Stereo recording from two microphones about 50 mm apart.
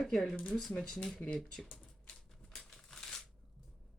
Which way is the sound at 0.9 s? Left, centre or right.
Centre.